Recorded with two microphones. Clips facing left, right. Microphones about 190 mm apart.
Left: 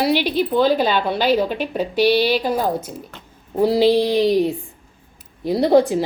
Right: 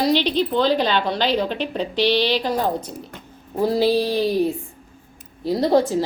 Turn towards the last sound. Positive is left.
turn(degrees=15)  # may be behind; listen again after turning